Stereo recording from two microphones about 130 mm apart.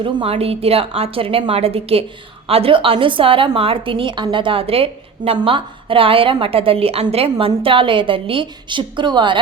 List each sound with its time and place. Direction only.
0.0 s a woman's voice: 45° right (ahead or behind)